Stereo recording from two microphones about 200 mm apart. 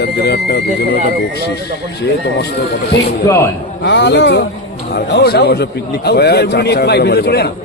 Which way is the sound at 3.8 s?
60° left (ahead or behind).